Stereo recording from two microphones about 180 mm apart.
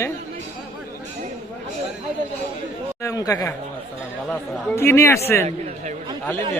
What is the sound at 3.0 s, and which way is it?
Speech, 20° left (ahead or behind).